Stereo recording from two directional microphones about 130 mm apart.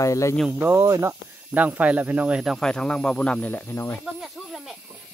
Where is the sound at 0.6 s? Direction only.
15° right (ahead or behind).